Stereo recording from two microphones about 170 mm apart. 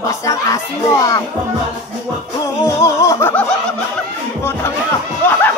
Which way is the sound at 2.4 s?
20° left (ahead or behind).